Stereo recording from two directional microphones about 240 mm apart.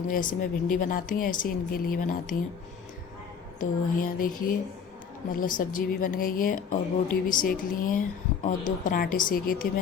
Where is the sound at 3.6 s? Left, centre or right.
Left.